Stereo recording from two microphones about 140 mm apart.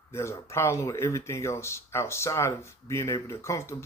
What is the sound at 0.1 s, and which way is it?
Speech, 20° left (ahead or behind).